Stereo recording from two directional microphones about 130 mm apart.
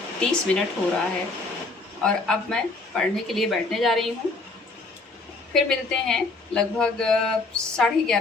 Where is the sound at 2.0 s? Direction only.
5° left (ahead or behind).